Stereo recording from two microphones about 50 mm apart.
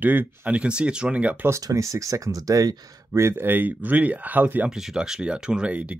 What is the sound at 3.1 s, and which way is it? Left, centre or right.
Speech, right.